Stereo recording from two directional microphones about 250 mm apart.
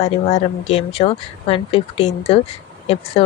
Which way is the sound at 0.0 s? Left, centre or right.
Left.